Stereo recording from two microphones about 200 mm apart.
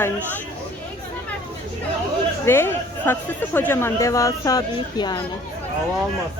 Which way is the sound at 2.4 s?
10° left (ahead or behind).